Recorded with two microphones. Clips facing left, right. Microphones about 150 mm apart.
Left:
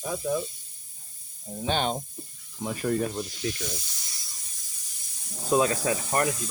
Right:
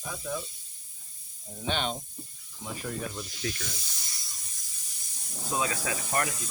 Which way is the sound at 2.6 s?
60° left (ahead or behind).